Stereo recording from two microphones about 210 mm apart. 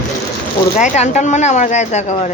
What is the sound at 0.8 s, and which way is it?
A woman's voice, 35° left (ahead or behind).